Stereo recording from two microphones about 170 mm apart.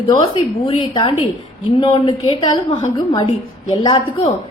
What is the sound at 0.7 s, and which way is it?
A woman's voice, 30° left (ahead or behind).